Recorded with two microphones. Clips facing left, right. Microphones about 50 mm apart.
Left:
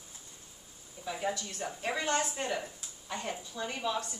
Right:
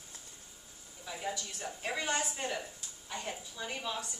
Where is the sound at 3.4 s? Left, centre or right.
Centre.